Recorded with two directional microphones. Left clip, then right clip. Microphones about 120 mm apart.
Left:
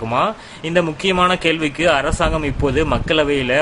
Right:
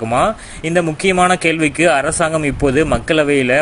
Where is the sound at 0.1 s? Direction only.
25° right (ahead or behind).